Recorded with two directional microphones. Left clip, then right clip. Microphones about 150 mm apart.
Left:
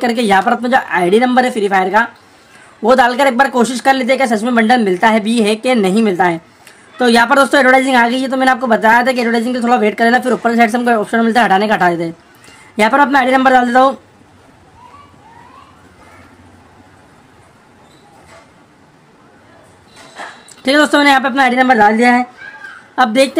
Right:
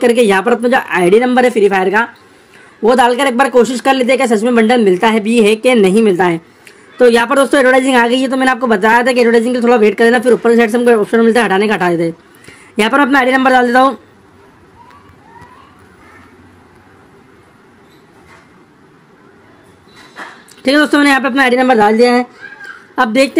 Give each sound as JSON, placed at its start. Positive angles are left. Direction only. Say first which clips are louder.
{"t": 0.0, "sound": "speech", "louder": "right 2 dB", "side_deg": -5}
{"t": 2.8, "sound": "a woman's voice", "louder": "even", "side_deg": 0}
{"t": 20.6, "sound": "speech", "louder": "even", "side_deg": -5}